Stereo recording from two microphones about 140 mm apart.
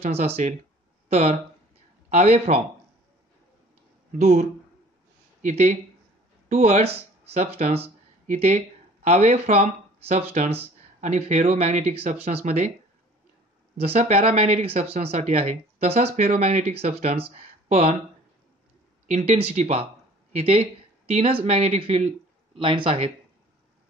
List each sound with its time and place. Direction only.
0.0 s a man's voice: 50° right (ahead or behind)
4.2 s speech: 50° right (ahead or behind)
13.7 s speech: 50° right (ahead or behind)
19.0 s speech: 50° right (ahead or behind)